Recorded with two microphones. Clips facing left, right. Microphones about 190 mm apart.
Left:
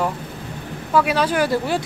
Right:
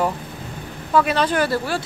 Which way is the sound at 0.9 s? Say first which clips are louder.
Even; 10° left (ahead or behind).